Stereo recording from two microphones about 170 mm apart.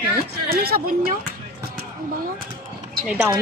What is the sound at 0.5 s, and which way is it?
Speech, 65° right (ahead or behind).